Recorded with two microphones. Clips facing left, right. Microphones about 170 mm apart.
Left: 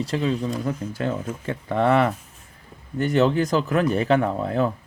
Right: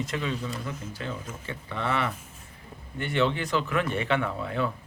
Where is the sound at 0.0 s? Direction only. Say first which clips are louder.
Left 7 dB; 35° left (ahead or behind).